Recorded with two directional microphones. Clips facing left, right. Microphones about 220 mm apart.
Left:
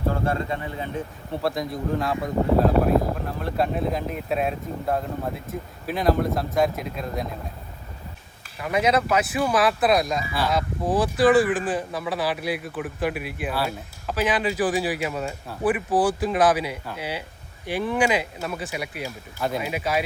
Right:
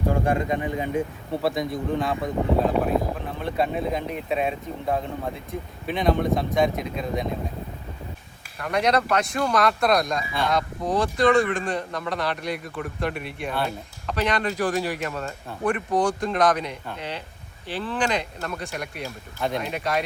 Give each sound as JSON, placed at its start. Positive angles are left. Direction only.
{"t": 0.1, "sound": "speech", "side_deg": -15}
{"t": 1.3, "sound": "speech", "side_deg": 0}
{"t": 8.5, "sound": "speech", "side_deg": 5}